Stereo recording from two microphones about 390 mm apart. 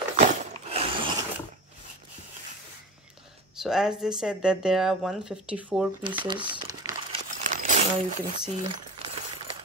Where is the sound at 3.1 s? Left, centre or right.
Centre.